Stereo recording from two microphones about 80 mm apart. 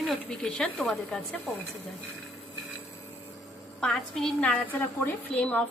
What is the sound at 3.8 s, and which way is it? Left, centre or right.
A woman's voice, centre.